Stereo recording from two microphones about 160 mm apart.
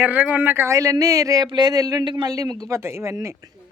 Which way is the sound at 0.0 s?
10° right (ahead or behind).